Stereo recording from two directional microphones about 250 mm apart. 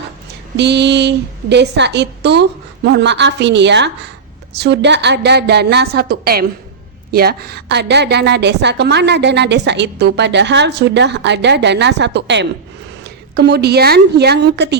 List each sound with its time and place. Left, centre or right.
0.5 s a woman's voice: right